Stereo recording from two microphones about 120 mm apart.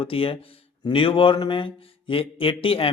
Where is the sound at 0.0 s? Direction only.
50° left (ahead or behind).